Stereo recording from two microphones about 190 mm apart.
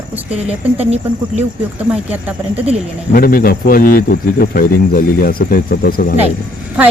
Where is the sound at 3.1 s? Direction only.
50° left (ahead or behind).